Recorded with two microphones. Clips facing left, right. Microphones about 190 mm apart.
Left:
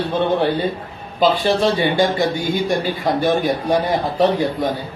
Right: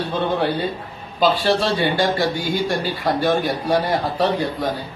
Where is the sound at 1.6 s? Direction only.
20° left (ahead or behind).